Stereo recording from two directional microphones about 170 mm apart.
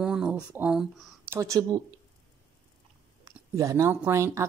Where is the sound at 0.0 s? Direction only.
5° right (ahead or behind).